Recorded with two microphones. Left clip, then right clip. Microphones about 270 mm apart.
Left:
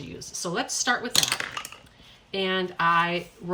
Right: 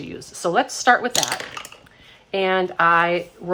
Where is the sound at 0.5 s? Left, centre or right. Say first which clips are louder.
Right 9 dB; centre.